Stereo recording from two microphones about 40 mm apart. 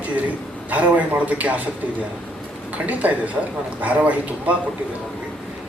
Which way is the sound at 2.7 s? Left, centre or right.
Right.